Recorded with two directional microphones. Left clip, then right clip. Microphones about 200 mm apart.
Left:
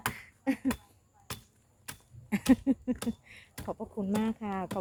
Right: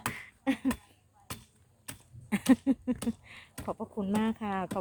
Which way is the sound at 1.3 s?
35° left (ahead or behind).